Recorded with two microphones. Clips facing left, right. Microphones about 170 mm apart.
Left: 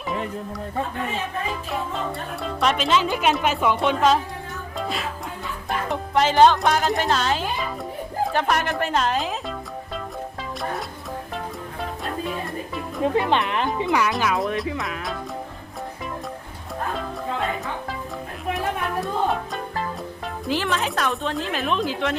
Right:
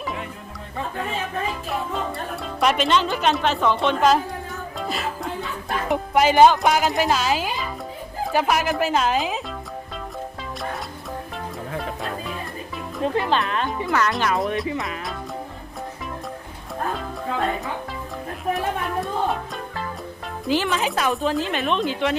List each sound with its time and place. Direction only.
2.4 s speech: centre (ahead or behind)
4.8 s music: centre (ahead or behind)
8.2 s speech: 5° right (ahead or behind)
13.0 s speech: 20° left (ahead or behind)
14.1 s speech: centre (ahead or behind)
18.5 s music: centre (ahead or behind)
20.4 s speech: centre (ahead or behind)